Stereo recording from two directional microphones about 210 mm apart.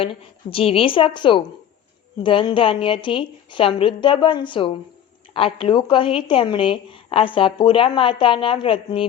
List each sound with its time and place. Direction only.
0.0 s speech: 25° left (ahead or behind)